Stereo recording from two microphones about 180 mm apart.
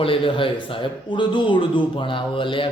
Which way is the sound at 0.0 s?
30° left (ahead or behind).